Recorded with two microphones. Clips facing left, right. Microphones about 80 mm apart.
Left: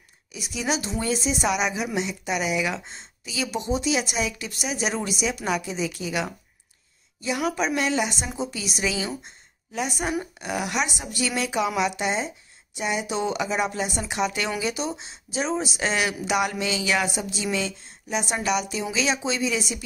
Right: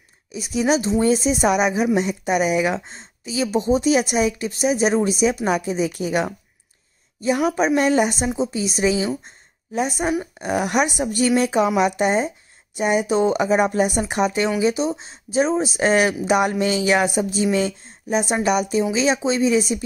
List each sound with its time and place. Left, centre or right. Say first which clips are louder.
0.3 s speech: right 8 dB; right
8.4 s a woman's voice: right 5 dB; right